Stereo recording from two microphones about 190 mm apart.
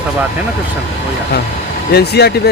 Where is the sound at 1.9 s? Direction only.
60° left (ahead or behind).